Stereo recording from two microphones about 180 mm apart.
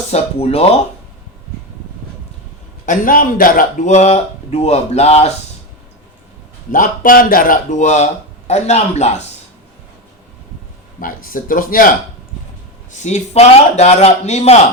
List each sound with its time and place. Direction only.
0.1 s a man's voice: 35° left (ahead or behind)
2.8 s speech: 45° left (ahead or behind)
6.7 s a man's voice: 50° left (ahead or behind)
11.0 s speech: 50° left (ahead or behind)
12.9 s a man's voice: 40° left (ahead or behind)